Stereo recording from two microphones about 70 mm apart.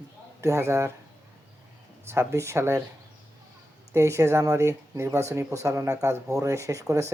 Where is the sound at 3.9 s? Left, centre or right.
Right.